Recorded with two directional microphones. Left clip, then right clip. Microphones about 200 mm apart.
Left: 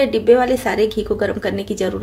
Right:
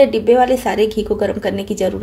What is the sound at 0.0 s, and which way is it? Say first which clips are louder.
A woman's voice: right 2 dB; 5° right (ahead or behind).